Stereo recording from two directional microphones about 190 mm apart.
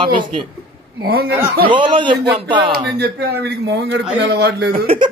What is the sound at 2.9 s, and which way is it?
A man's voice, 60° right (ahead or behind).